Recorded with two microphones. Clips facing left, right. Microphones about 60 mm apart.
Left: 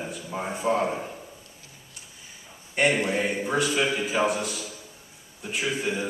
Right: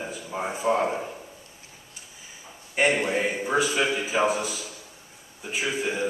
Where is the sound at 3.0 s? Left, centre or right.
Centre.